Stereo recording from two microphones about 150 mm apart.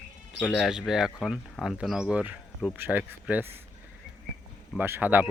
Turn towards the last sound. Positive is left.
turn(degrees=-10)  # may be behind; listen again after turning